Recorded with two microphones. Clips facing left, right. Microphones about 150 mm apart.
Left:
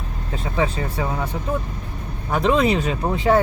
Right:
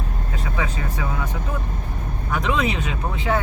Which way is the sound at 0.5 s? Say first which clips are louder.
Left 6 dB; 30° left (ahead or behind).